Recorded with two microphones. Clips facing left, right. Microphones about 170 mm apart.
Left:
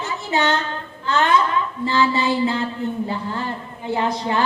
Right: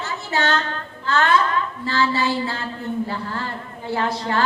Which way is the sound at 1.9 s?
20° left (ahead or behind).